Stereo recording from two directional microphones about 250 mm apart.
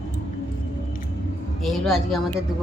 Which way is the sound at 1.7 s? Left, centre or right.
Centre.